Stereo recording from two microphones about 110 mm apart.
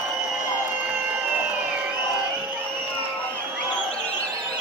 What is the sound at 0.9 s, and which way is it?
Music, 15° right (ahead or behind).